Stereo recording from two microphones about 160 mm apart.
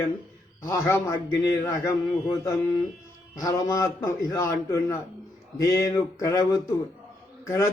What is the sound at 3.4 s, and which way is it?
A man's voice, 20° left (ahead or behind).